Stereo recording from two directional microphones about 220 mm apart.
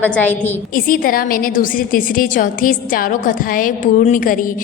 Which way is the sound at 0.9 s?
40° left (ahead or behind).